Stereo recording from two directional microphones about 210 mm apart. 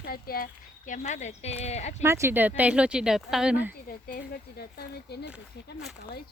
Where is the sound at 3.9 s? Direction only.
45° left (ahead or behind).